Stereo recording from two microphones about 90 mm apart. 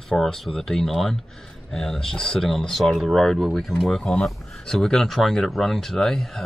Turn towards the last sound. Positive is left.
turn(degrees=5)  # may be behind; listen again after turning